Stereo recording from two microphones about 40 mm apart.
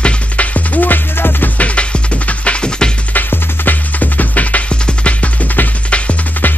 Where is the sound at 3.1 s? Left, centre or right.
Left.